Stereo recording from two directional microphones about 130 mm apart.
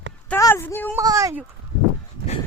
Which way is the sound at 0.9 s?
25° right (ahead or behind).